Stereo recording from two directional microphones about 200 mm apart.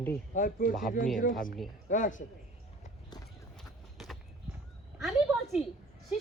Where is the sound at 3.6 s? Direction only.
Centre (ahead or behind).